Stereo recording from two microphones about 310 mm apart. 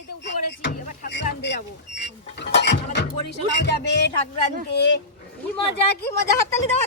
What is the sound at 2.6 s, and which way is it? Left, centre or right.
Speech, left.